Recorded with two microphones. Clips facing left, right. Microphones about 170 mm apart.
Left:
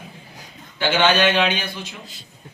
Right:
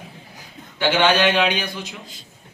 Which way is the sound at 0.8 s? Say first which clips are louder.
Even; 15° right (ahead or behind).